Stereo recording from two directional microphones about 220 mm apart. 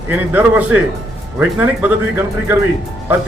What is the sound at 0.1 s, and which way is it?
Speech, 10° right (ahead or behind).